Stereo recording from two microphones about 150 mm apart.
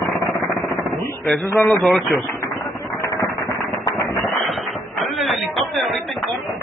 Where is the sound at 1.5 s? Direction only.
20° left (ahead or behind).